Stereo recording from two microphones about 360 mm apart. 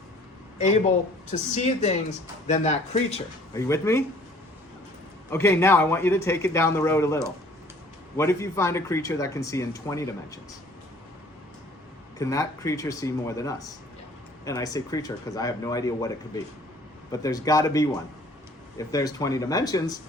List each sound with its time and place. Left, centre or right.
1.3 s speech: centre
5.3 s speech: centre
12.2 s speech: centre